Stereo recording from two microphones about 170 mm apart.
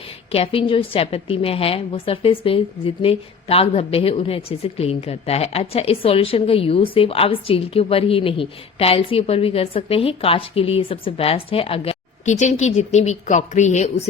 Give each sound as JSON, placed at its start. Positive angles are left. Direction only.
{"t": 0.3, "sound": "a woman's voice", "side_deg": 35}